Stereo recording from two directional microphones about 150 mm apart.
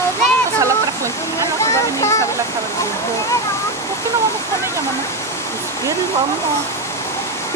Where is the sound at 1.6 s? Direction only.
20° left (ahead or behind).